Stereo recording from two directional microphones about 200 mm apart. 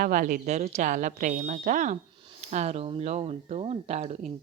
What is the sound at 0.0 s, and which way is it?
A woman's voice, 45° right (ahead or behind).